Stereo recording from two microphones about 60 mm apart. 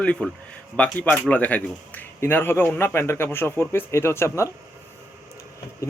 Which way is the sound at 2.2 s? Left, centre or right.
Left.